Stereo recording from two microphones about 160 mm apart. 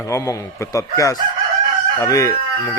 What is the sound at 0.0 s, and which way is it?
Speech, 20° left (ahead or behind).